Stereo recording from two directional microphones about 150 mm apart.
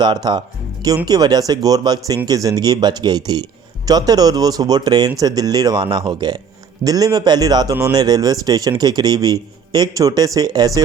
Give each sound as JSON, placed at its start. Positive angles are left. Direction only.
{"t": 0.0, "sound": "speech", "side_deg": -30}